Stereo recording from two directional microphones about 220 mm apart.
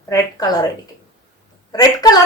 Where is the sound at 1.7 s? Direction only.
15° left (ahead or behind).